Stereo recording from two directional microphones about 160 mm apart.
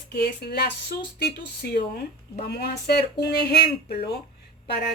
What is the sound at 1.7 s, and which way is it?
Speech, 75° left (ahead or behind).